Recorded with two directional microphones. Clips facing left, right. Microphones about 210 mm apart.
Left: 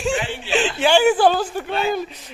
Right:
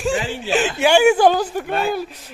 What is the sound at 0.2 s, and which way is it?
Speech, 40° right (ahead or behind).